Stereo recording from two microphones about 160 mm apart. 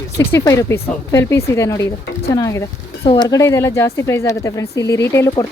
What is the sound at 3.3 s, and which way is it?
Speech, 20° left (ahead or behind).